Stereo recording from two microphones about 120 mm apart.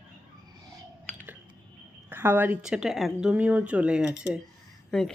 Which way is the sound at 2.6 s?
5° right (ahead or behind).